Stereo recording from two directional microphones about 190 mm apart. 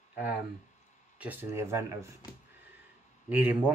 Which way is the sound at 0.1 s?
10° right (ahead or behind).